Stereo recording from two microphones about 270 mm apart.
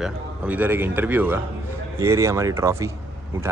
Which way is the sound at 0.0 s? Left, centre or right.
Centre.